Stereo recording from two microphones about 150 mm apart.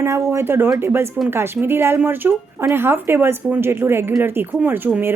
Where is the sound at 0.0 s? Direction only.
15° right (ahead or behind).